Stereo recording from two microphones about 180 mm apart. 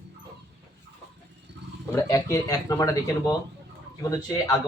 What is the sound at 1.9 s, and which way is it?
Speech, 15° left (ahead or behind).